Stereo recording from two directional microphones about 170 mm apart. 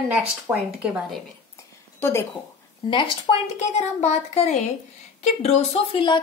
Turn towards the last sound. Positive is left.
turn(degrees=30)  # may be behind; listen again after turning